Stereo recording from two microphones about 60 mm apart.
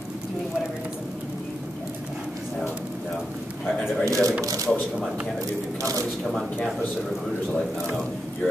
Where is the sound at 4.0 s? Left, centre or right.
Right.